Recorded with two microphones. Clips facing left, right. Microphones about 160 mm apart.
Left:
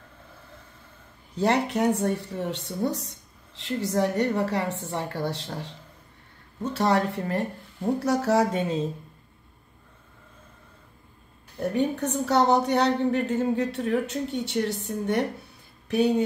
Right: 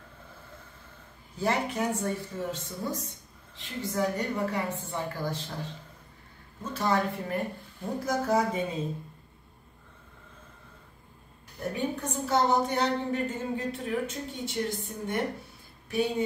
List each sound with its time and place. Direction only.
1.3 s speech: 75° left (ahead or behind)
6.7 s speech: 75° left (ahead or behind)
11.7 s speech: 70° left (ahead or behind)